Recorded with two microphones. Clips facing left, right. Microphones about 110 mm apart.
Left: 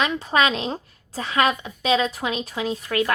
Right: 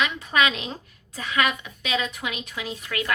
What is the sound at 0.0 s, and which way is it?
A woman's voice, 35° left (ahead or behind).